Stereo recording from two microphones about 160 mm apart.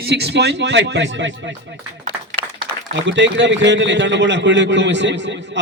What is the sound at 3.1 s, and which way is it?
A man's voice, 90° right.